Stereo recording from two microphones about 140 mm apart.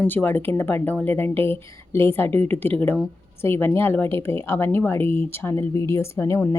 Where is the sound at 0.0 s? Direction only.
10° left (ahead or behind).